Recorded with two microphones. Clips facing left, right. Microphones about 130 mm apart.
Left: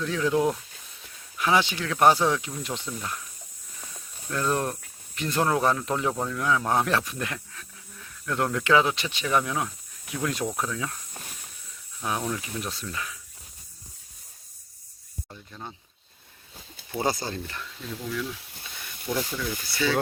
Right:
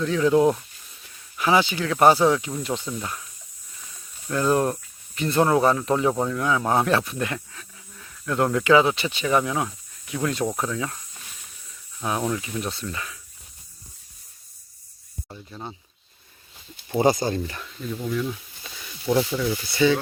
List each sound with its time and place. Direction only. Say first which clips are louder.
0.0 s speech: right 5 dB; centre (ahead or behind)
4.3 s speech: right 5 dB; 5° right (ahead or behind)
15.3 s speech: right 5 dB; 15° right (ahead or behind)
16.9 s speech: right 8 dB; 15° right (ahead or behind)
18.1 s speech: right 5 dB; 25° right (ahead or behind)
19.1 s speech: right 8 dB; 55° right (ahead or behind)
19.8 s speech: right 7 dB; 20° right (ahead or behind)